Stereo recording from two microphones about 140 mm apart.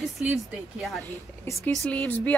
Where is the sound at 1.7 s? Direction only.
5° left (ahead or behind).